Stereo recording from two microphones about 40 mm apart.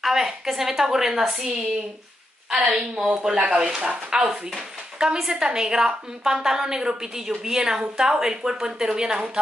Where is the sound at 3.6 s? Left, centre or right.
Centre.